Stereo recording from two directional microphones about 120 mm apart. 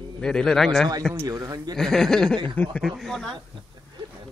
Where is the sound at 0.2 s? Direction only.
5° left (ahead or behind).